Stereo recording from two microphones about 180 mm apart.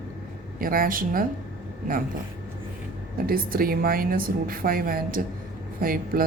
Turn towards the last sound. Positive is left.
turn(degrees=-55)  # may be behind; listen again after turning